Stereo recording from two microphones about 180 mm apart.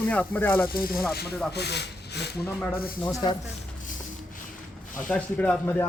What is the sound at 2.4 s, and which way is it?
Speech, 10° left (ahead or behind).